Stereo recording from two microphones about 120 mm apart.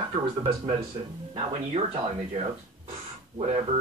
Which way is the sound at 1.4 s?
60° right (ahead or behind).